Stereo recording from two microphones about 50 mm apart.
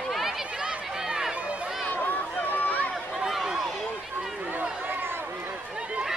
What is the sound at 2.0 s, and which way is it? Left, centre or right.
Run, left.